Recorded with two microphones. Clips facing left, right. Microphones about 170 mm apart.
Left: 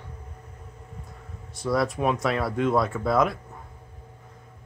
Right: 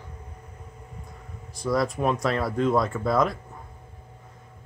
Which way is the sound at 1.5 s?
Centre (ahead or behind).